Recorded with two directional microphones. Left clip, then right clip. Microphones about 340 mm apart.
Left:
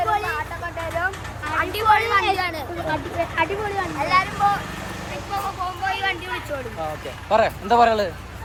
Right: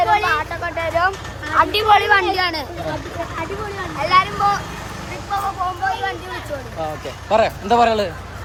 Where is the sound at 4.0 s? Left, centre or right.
Right.